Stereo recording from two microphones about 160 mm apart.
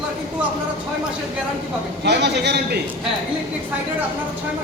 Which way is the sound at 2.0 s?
90° right.